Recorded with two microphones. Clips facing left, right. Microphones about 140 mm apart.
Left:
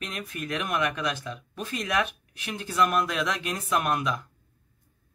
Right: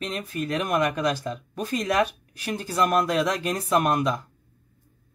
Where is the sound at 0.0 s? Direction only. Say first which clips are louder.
Right 6 dB; 30° right (ahead or behind).